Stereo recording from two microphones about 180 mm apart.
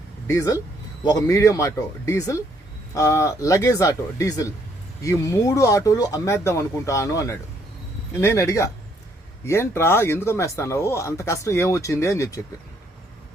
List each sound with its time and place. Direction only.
0.3 s speech: 15° left (ahead or behind)